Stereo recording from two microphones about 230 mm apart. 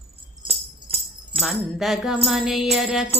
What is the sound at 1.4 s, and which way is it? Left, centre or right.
Music, centre.